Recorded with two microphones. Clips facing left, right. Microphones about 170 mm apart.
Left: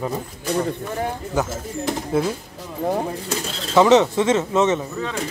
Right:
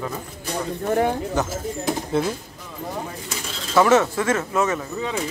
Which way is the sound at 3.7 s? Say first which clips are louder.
Left 3 dB; 20° left (ahead or behind).